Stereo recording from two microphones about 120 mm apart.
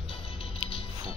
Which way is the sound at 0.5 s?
50° left (ahead or behind).